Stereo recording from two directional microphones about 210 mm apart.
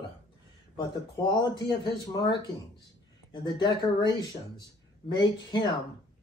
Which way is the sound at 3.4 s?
20° left (ahead or behind).